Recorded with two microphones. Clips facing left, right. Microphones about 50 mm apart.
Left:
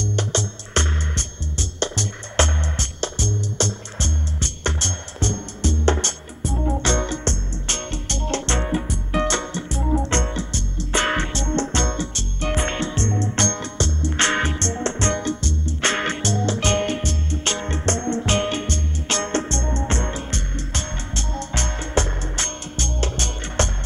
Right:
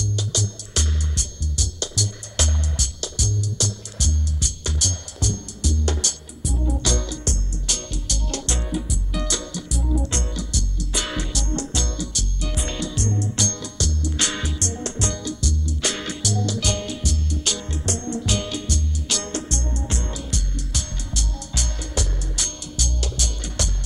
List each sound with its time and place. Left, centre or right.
0.0 s music: left